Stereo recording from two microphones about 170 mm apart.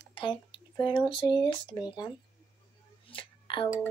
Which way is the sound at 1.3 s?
25° left (ahead or behind).